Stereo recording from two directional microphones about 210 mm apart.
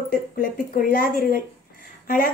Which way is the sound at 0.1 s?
45° left (ahead or behind).